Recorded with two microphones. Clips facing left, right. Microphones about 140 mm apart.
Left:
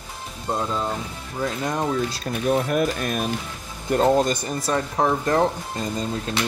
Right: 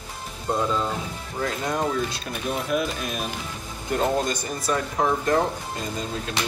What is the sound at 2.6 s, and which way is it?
Speech, 50° left (ahead or behind).